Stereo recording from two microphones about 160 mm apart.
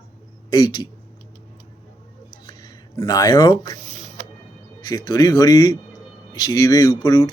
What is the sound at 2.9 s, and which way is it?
Speech, 20° left (ahead or behind).